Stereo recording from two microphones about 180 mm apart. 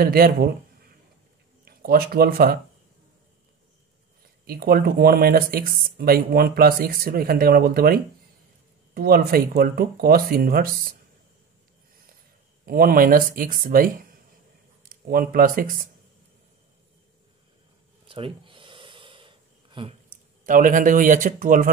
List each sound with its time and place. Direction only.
0.0 s speech: 55° right (ahead or behind)
4.5 s speech: 55° right (ahead or behind)
12.6 s speech: 55° right (ahead or behind)
18.0 s gasp: 30° right (ahead or behind)
20.4 s speech: 50° right (ahead or behind)